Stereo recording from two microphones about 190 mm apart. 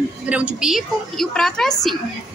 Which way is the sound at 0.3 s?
5° right (ahead or behind).